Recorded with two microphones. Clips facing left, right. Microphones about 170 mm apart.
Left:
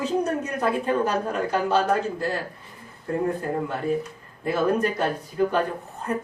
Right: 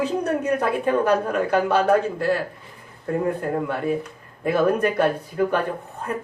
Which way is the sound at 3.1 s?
60° right (ahead or behind).